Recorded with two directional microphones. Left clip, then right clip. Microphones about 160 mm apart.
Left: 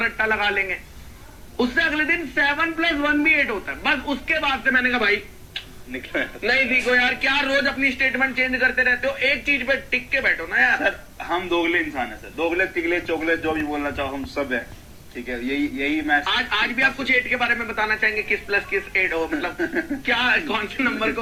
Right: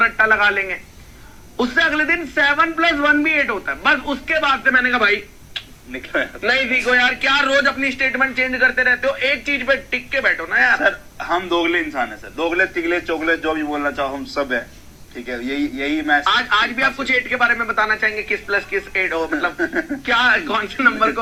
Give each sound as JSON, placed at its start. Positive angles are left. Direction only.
{"t": 0.0, "sound": "a man's voice", "side_deg": -35}